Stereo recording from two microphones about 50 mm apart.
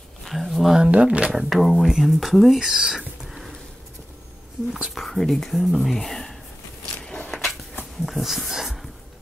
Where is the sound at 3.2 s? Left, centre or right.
Centre.